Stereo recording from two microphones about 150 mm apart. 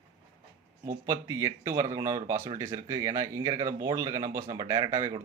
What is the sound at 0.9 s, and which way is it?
Speech, 20° right (ahead or behind).